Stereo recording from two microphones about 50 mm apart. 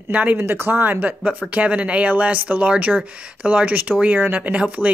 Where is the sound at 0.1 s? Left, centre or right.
Right.